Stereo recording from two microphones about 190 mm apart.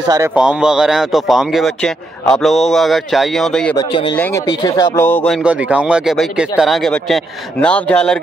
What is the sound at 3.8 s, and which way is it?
Speech, 25° left (ahead or behind).